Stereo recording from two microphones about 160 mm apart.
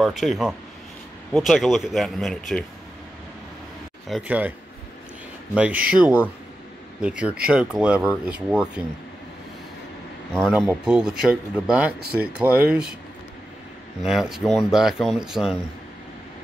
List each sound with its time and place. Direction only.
0.0 s speech: centre (ahead or behind)
4.3 s speech: 10° right (ahead or behind)
10.5 s speech: 5° right (ahead or behind)
14.0 s speech: 5° right (ahead or behind)